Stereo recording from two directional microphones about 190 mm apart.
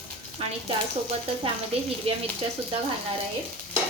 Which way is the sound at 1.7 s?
30° right (ahead or behind).